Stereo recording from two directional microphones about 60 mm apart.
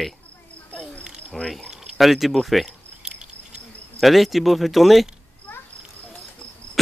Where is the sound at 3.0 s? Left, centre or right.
Centre.